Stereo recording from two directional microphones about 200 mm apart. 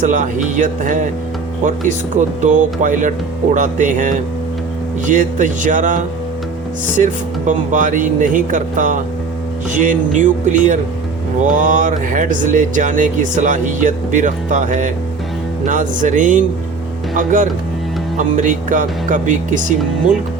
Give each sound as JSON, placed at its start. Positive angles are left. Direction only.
{"t": 0.0, "sound": "speech", "side_deg": -40}